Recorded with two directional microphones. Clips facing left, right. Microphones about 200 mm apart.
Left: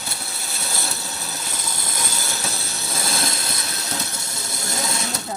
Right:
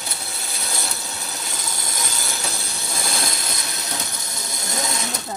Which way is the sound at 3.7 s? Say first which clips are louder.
Left 1 dB; 15° right (ahead or behind).